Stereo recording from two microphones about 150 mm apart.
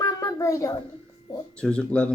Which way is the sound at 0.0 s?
25° left (ahead or behind).